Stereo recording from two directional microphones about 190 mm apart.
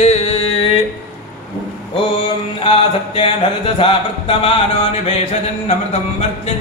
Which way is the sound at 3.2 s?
30° left (ahead or behind).